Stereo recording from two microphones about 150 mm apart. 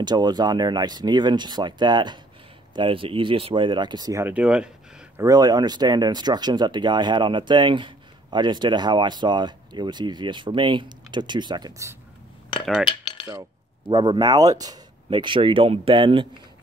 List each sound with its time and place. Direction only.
0.0 s speech: 30° right (ahead or behind)
4.3 s speech: 10° right (ahead or behind)
5.1 s speech: 25° right (ahead or behind)
12.8 s cutlery: 30° left (ahead or behind)
13.3 s speech: 25° right (ahead or behind)